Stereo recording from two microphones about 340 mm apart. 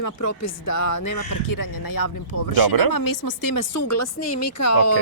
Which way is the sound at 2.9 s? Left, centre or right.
Left.